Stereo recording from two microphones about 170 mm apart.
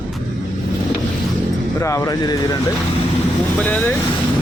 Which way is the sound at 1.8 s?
15° left (ahead or behind).